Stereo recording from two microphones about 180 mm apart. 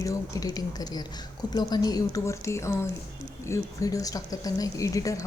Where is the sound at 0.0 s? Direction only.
20° left (ahead or behind).